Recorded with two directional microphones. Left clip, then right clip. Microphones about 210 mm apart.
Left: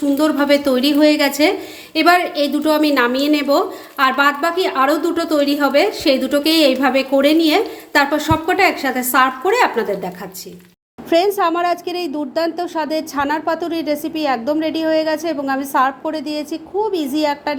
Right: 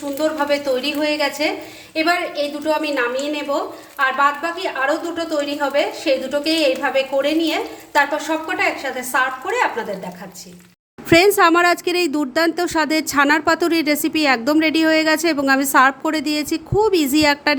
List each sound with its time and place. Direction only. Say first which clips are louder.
0.2 s a woman's voice: left 2 dB; 40° left (ahead or behind)
11.3 s speech: right 3 dB; 30° right (ahead or behind)